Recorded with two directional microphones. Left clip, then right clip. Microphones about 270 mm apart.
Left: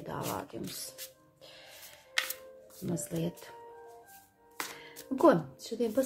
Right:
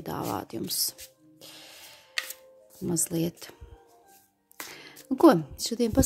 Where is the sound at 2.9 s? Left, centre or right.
Right.